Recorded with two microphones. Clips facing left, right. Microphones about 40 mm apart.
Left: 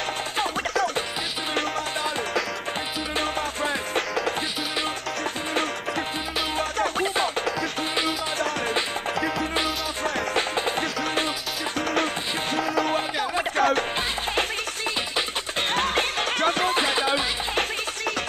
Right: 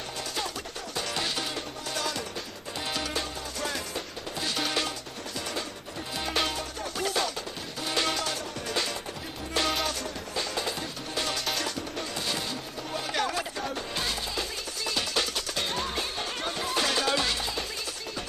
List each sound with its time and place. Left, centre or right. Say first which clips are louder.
13.6 s music: left 12 dB; left
15.7 s music: left 8 dB; left
16.7 s music: left 4 dB; left